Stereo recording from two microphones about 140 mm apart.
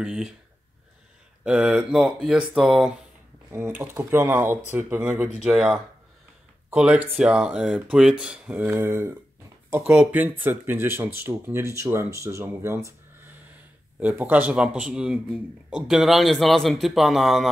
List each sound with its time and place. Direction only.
0.0 s a man's voice: 5° right (ahead or behind)
1.4 s a man's voice: 10° right (ahead or behind)
3.4 s a man's voice: 15° right (ahead or behind)